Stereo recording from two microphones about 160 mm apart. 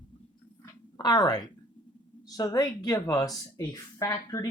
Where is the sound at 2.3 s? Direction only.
25° left (ahead or behind).